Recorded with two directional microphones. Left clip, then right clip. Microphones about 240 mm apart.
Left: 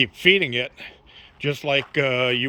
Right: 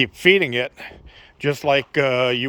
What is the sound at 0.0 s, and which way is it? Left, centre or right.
A man's voice, centre.